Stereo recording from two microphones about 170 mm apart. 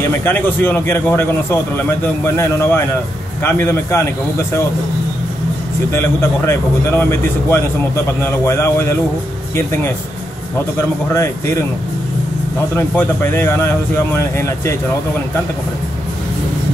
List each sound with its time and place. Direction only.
0.2 s a man's voice: 10° left (ahead or behind)
5.9 s a man's voice: 15° left (ahead or behind)
11.1 s a man's voice: 15° left (ahead or behind)
12.7 s a man's voice: 10° left (ahead or behind)